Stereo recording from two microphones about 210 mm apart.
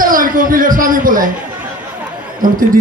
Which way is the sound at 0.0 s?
40° right (ahead or behind).